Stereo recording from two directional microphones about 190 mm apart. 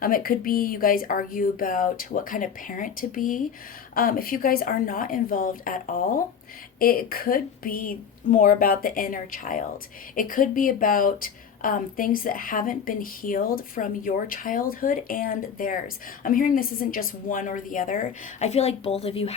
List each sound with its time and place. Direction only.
0.0 s a woman's voice: 50° left (ahead or behind); by 19.3 s 30° left (ahead or behind)